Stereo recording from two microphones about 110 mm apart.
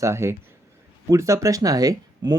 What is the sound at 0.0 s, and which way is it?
Speech, 25° right (ahead or behind).